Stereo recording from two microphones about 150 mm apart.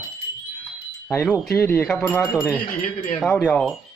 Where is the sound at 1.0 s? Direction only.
10° left (ahead or behind).